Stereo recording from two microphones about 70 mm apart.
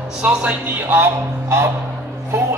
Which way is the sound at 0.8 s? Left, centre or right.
Right.